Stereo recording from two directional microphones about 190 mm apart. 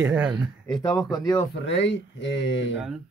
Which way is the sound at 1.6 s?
70° left (ahead or behind).